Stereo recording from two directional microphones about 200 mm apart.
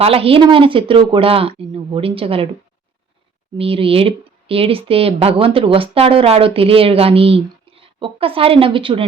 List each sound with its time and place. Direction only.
0.0 s speech: 30° right (ahead or behind)
3.6 s speech: 25° right (ahead or behind)